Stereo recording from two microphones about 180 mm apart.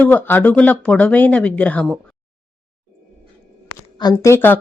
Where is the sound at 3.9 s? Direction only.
20° left (ahead or behind).